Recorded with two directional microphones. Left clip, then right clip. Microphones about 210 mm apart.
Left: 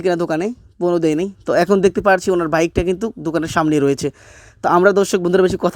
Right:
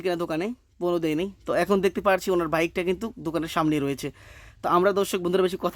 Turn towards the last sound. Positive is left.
turn(degrees=20)  # may be behind; listen again after turning